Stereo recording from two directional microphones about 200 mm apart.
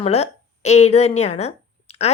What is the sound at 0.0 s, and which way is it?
A woman's voice, 30° left (ahead or behind).